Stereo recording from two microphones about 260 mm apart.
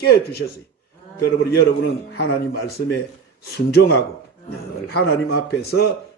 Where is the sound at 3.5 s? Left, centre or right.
Left.